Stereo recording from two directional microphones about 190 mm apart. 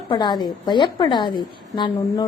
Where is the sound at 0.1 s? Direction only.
25° left (ahead or behind).